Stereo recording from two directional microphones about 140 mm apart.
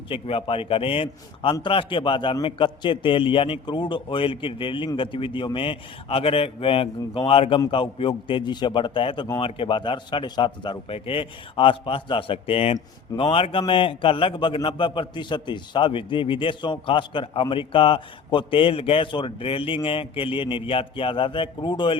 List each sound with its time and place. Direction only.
0.1 s a man's voice: 40° left (ahead or behind)